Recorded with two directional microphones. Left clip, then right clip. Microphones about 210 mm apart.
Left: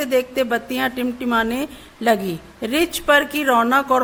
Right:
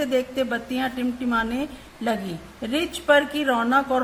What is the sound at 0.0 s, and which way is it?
A woman's voice, 45° left (ahead or behind).